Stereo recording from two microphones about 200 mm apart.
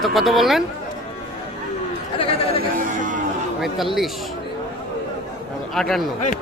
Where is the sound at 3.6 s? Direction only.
Centre (ahead or behind).